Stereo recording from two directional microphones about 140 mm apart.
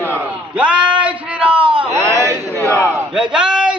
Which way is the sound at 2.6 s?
10° left (ahead or behind).